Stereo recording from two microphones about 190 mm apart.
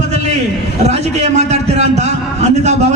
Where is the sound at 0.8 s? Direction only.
35° right (ahead or behind).